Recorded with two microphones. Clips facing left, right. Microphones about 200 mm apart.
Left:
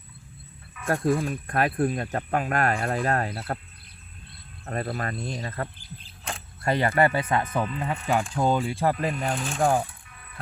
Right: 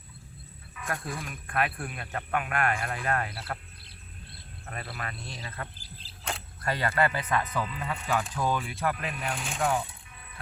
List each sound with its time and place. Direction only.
0.9 s speech: 40° left (ahead or behind)
4.6 s speech: 40° left (ahead or behind)
5.8 s arrow: 35° right (ahead or behind)
6.6 s speech: 25° left (ahead or behind)